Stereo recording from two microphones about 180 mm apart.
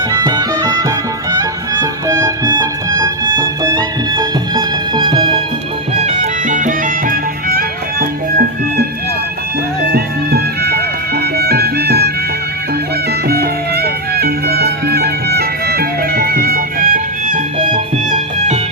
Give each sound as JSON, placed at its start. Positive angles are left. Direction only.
{"t": 0.1, "sound": "music", "side_deg": -20}
{"t": 6.0, "sound": "music", "side_deg": -40}
{"t": 9.9, "sound": "music", "side_deg": -60}
{"t": 13.2, "sound": "music", "side_deg": -60}